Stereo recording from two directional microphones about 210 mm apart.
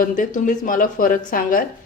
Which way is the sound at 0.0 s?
40° left (ahead or behind).